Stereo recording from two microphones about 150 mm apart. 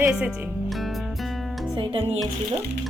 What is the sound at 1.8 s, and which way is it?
Music, 35° right (ahead or behind).